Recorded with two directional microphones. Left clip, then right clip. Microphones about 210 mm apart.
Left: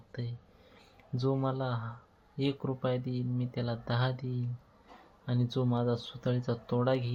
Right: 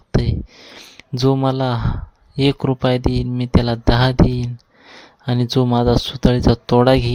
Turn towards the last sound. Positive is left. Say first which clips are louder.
# right 17 dB
turn(degrees=-55)  # may be behind; listen again after turning